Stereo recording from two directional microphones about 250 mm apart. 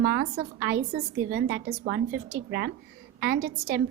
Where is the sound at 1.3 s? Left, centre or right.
Right.